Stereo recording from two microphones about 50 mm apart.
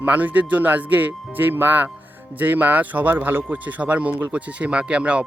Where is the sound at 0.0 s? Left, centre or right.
Right.